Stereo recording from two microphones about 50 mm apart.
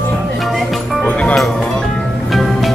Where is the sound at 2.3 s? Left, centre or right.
Centre.